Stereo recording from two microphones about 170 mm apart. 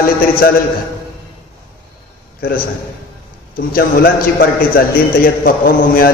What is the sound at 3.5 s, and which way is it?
A man's voice, 60° left (ahead or behind).